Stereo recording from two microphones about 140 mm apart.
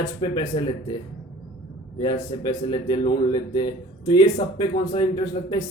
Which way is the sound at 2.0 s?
30° left (ahead or behind).